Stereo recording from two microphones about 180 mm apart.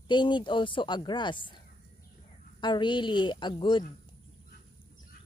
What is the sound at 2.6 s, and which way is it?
Speech, 25° left (ahead or behind).